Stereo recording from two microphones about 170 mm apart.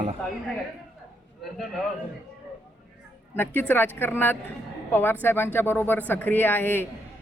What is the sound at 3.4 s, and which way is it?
A man's voice, 10° left (ahead or behind).